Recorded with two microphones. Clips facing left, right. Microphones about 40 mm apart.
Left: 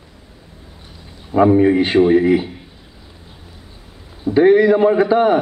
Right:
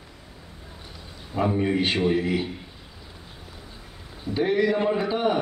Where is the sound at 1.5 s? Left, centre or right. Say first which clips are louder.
Left 11 dB; left.